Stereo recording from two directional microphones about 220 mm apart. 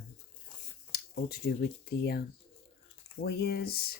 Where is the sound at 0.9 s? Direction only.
45° left (ahead or behind).